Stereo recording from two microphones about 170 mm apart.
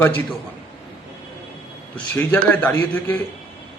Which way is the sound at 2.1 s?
10° left (ahead or behind).